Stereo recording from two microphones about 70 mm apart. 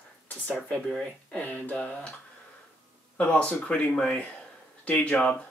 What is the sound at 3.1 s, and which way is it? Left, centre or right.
Speech, centre.